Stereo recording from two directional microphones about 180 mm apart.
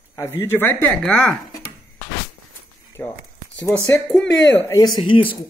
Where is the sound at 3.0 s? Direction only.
10° left (ahead or behind).